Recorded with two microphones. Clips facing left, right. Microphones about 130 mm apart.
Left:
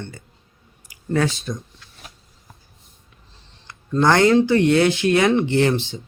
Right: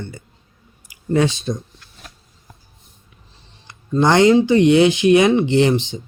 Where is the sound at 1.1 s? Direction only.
20° right (ahead or behind).